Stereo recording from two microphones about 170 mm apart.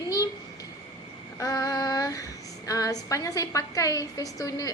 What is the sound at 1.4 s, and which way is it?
Female singing, 20° left (ahead or behind).